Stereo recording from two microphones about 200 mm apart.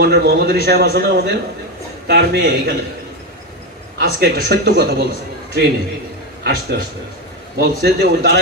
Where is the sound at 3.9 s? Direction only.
50° right (ahead or behind).